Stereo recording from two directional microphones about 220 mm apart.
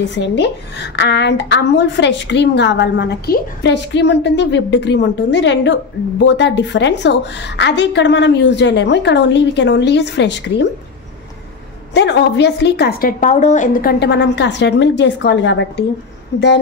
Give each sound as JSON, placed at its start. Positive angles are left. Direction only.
{"t": 0.1, "sound": "a woman's voice", "side_deg": 55}
{"t": 11.9, "sound": "a woman's voice", "side_deg": 50}
{"t": 13.2, "sound": "a woman's voice", "side_deg": 35}